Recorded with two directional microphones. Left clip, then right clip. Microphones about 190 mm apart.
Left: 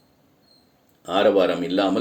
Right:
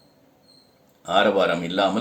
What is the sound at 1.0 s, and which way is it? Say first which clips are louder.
Speech: left 1 dB; 45° left (ahead or behind).